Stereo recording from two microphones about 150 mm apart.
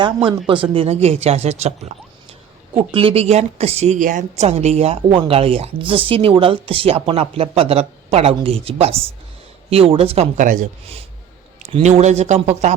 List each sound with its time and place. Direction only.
0.3 s a woman's voice: 35° right (ahead or behind)
2.7 s a woman's voice: 35° right (ahead or behind)
10.3 s speech: 60° right (ahead or behind)
11.7 s speech: 45° right (ahead or behind)